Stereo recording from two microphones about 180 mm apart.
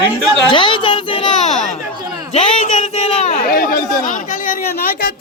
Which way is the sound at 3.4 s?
50° left (ahead or behind).